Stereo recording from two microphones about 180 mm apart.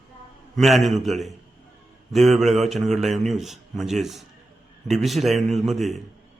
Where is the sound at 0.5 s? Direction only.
Centre (ahead or behind).